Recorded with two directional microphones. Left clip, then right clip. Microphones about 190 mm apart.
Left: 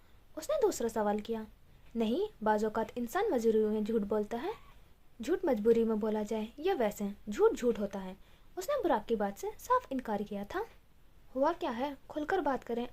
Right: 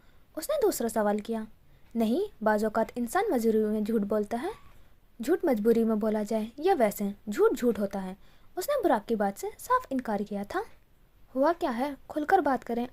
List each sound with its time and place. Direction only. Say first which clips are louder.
0.3 s a woman's voice: right 4 dB; 25° right (ahead or behind)